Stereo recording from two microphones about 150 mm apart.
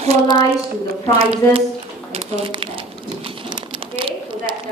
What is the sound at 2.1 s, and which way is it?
Crumpling, 40° right (ahead or behind).